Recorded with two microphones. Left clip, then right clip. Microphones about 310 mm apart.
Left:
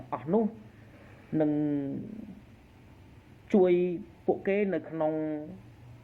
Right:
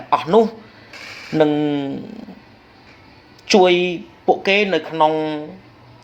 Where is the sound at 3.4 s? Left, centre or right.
Right.